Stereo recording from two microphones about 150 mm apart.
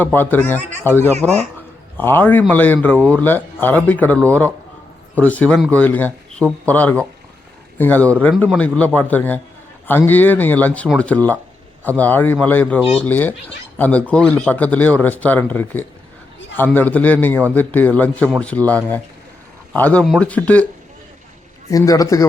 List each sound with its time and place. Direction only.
0.0 s speech: 10° left (ahead or behind)
21.7 s a man's voice: 25° left (ahead or behind)